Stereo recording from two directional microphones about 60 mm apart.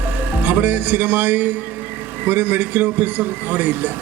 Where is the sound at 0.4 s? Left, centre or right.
Right.